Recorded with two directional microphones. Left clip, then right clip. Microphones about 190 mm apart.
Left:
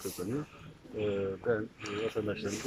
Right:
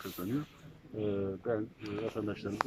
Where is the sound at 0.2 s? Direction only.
10° right (ahead or behind).